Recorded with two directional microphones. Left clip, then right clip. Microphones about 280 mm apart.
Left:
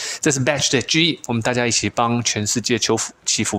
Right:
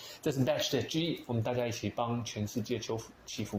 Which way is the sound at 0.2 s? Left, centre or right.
Left.